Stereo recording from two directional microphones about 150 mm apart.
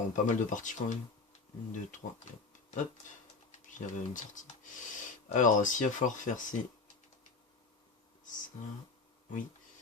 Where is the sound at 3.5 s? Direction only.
55° left (ahead or behind).